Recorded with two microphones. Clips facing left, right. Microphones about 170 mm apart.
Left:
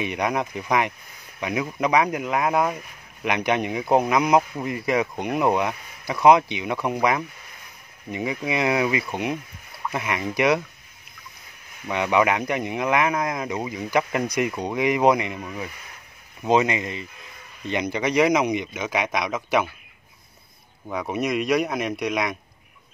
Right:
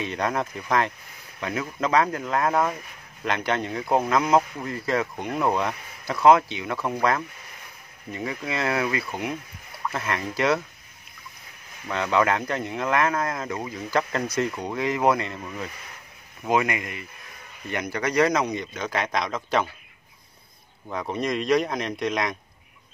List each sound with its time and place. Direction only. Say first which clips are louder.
0.0 s speech: left 2 dB; 15° left (ahead or behind)
11.9 s speech: left 2 dB; 15° left (ahead or behind)
16.4 s speech: left 3 dB; 25° left (ahead or behind)
20.9 s speech: left 2 dB; 5° left (ahead or behind)